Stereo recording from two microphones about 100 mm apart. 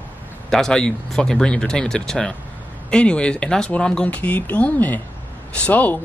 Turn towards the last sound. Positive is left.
turn(degrees=15)  # may be behind; listen again after turning